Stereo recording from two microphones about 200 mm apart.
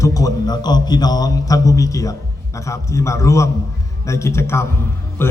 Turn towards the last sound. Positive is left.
turn(degrees=10)  # may be behind; listen again after turning